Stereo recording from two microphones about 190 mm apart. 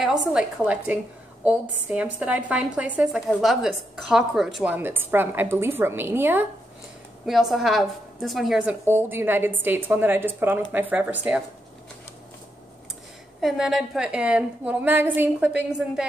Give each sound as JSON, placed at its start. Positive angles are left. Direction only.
{"t": 0.0, "sound": "a woman's voice", "side_deg": 0}
{"t": 13.4, "sound": "a woman's voice", "side_deg": 0}